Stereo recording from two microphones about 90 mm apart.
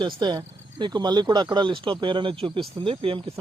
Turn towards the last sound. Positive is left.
turn(degrees=-80)